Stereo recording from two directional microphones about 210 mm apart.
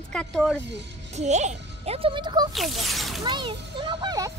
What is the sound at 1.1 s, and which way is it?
Speech, 35° right (ahead or behind).